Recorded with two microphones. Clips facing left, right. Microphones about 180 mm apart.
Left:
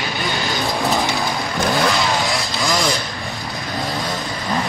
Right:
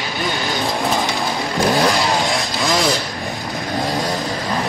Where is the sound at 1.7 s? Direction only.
30° right (ahead or behind).